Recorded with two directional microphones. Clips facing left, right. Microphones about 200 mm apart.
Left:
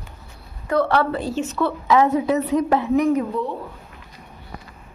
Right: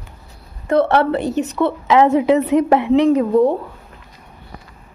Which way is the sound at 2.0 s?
90° right.